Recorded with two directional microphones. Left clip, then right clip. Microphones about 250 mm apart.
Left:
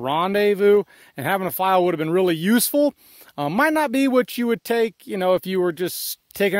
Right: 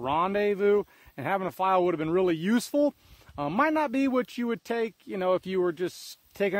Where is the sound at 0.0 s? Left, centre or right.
Left.